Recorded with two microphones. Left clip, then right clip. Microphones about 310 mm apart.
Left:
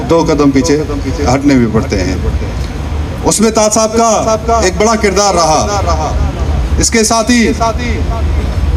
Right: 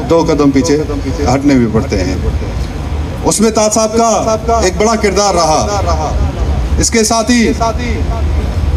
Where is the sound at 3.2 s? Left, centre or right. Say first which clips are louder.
Left 1 dB; left.